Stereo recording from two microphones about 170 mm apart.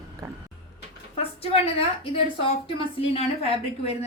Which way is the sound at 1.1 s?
35° left (ahead or behind).